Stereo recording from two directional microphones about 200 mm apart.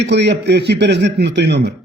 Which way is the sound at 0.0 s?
60° right (ahead or behind).